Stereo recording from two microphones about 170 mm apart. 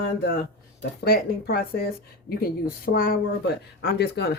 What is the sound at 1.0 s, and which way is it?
Speech, 65° left (ahead or behind).